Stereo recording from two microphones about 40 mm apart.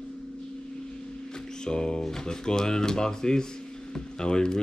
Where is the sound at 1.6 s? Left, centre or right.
Centre.